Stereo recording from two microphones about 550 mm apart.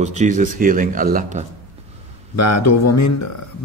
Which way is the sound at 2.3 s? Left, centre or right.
Left.